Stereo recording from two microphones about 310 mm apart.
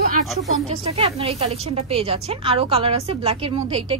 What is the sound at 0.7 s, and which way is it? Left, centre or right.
Speech, centre.